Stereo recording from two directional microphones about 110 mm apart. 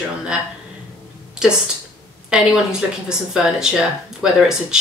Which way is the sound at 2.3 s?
5° right (ahead or behind).